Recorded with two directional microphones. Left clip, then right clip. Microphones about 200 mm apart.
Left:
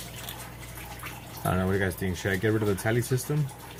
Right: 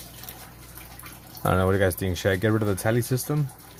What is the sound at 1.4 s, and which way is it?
Speech, 55° right (ahead or behind).